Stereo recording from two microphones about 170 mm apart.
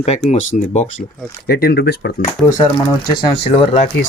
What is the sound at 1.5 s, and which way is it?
Speech, 65° left (ahead or behind).